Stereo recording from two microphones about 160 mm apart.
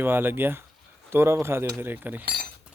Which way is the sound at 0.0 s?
15° right (ahead or behind).